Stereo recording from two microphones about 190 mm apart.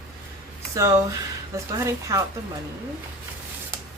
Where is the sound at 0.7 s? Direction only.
15° right (ahead or behind).